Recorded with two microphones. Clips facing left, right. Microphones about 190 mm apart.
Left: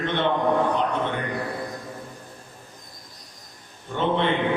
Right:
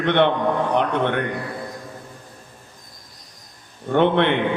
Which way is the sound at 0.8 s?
65° right (ahead or behind).